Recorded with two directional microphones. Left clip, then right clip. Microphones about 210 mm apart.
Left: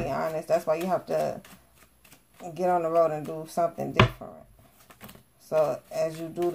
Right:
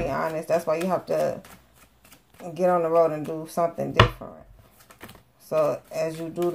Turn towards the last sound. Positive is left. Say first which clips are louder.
# right 1 dB
turn(degrees=0)  # may be behind; listen again after turning